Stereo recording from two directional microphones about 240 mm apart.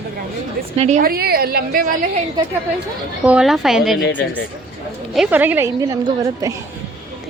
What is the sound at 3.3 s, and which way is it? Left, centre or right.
Speech, centre.